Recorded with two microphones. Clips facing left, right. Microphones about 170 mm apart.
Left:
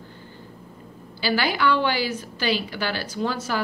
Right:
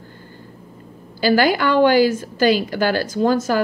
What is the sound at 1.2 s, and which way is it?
A woman's voice, 45° right (ahead or behind).